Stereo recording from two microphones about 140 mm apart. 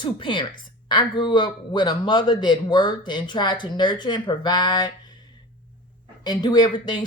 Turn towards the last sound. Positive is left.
turn(degrees=30)  # may be behind; listen again after turning